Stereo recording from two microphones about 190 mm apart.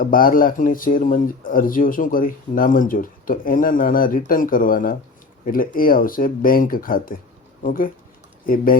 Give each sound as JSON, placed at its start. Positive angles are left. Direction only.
{"t": 0.0, "sound": "speech", "side_deg": 50}